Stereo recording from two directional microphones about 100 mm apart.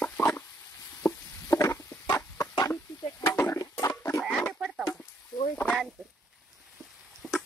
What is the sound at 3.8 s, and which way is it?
Frog, 30° left (ahead or behind).